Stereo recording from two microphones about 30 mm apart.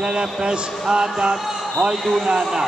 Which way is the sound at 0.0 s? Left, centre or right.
Right.